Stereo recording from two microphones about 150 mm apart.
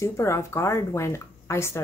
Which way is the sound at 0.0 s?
20° left (ahead or behind).